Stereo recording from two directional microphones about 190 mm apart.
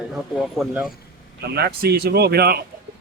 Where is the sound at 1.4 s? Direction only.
60° right (ahead or behind).